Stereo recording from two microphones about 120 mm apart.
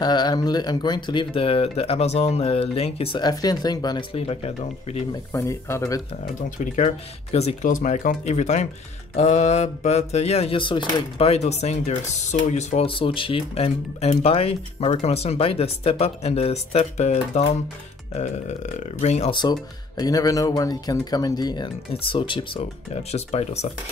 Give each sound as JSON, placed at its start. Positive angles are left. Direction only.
{"t": 0.0, "sound": "speech", "side_deg": 35}
{"t": 3.2, "sound": "speech", "side_deg": 35}
{"t": 4.1, "sound": "speech", "side_deg": 60}
{"t": 5.3, "sound": "speech", "side_deg": 25}
{"t": 6.6, "sound": "speech", "side_deg": 90}
{"t": 7.3, "sound": "speech", "side_deg": 75}
{"t": 10.6, "sound": "speech", "side_deg": 45}
{"t": 11.2, "sound": "speech", "side_deg": 65}
{"t": 12.8, "sound": "speech", "side_deg": 50}
{"t": 18.1, "sound": "speech", "side_deg": 80}
{"t": 20.0, "sound": "speech", "side_deg": 30}
{"t": 23.1, "sound": "speech", "side_deg": 65}